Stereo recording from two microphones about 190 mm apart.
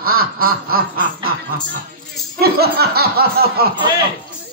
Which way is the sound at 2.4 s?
55° right (ahead or behind).